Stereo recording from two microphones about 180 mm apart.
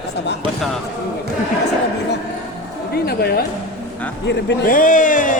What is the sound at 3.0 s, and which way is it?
Speech, 60° left (ahead or behind).